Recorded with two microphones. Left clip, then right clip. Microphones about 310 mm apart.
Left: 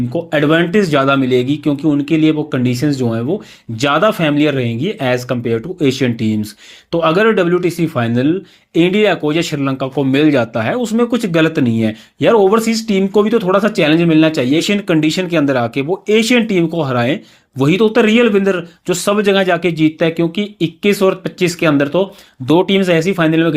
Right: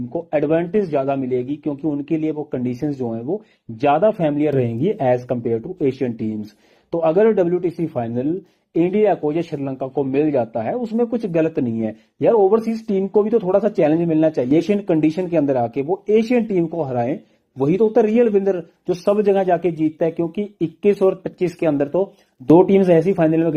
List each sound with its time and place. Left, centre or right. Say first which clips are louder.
0.3 s speech: left 5 dB; left